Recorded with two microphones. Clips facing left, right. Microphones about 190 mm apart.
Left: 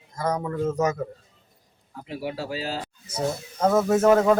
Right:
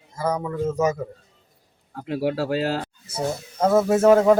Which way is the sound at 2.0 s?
65° right (ahead or behind).